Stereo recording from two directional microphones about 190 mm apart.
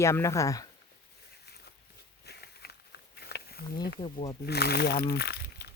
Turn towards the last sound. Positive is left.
turn(degrees=60)  # may be behind; listen again after turning